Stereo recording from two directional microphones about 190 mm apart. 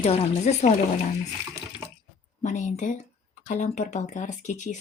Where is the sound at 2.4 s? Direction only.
40° left (ahead or behind).